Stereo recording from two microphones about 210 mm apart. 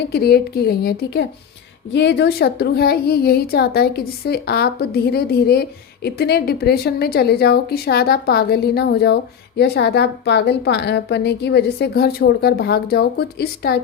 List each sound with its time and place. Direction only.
0.1 s a woman's voice: 50° left (ahead or behind)